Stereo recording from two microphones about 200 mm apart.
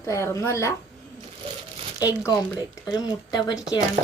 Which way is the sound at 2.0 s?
20° left (ahead or behind).